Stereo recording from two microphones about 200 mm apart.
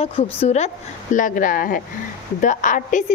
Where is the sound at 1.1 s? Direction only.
40° left (ahead or behind).